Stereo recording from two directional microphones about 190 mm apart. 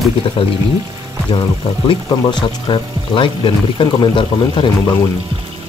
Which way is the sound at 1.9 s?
25° left (ahead or behind).